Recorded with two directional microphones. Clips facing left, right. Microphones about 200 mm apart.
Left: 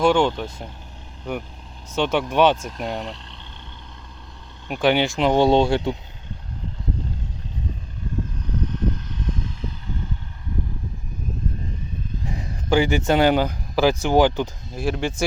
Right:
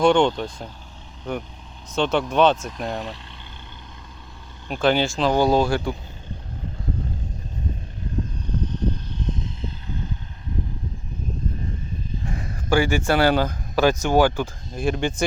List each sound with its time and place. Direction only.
0.0 s speech: 5° left (ahead or behind)
2.6 s speech: centre (ahead or behind)
4.7 s speech: 15° left (ahead or behind)
8.6 s vehicle: 30° right (ahead or behind)
12.7 s speech: 20° left (ahead or behind)
14.7 s speech: 5° left (ahead or behind)